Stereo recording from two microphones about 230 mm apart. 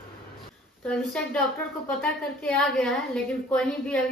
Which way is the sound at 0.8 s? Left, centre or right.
Centre.